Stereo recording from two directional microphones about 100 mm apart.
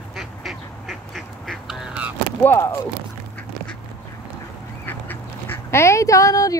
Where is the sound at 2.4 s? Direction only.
20° left (ahead or behind).